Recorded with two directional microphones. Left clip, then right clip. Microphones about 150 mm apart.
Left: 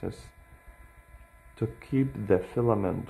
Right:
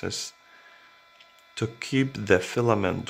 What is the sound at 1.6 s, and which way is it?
Speech, 5° right (ahead or behind).